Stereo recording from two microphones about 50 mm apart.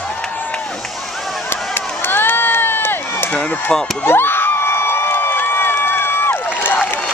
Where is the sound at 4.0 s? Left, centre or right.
Left.